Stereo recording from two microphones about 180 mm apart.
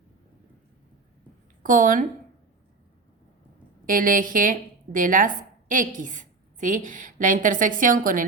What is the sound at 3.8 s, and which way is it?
A woman's voice, 50° right (ahead or behind).